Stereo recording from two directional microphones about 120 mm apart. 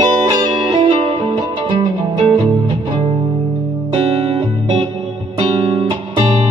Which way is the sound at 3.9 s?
55° right (ahead or behind).